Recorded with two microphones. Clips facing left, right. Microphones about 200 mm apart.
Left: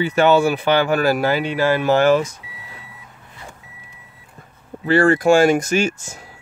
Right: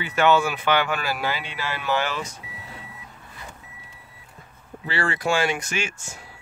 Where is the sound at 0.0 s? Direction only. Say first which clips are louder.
Left 5 dB; 35° left (ahead or behind).